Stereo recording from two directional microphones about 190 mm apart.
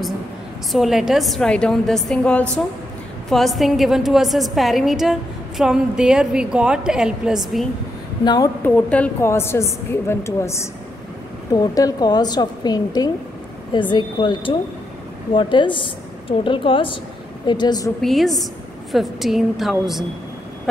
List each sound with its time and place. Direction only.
0.7 s a woman's voice: centre (ahead or behind)
8.2 s a woman's voice: 20° left (ahead or behind)
8.6 s a woman's voice: 10° left (ahead or behind)
18.0 s a woman's voice: centre (ahead or behind)
20.7 s vehicle: 5° left (ahead or behind)